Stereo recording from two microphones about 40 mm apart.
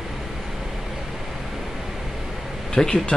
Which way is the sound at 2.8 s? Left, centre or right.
Left.